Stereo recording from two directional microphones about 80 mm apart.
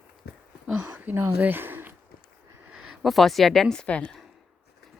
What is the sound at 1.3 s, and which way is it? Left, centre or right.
Speech, right.